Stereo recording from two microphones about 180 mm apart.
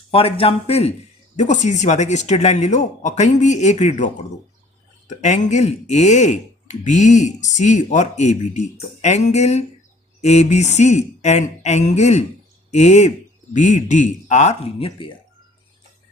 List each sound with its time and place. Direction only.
0.1 s speech: 30° left (ahead or behind)